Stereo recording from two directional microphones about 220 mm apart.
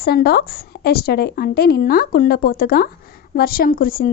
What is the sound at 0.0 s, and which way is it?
A woman's voice, 45° left (ahead or behind).